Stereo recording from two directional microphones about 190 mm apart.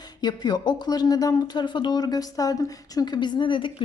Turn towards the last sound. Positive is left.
turn(degrees=25)  # may be behind; listen again after turning